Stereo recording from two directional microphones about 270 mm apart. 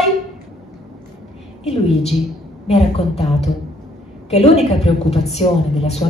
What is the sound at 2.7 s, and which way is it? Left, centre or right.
Speech, left.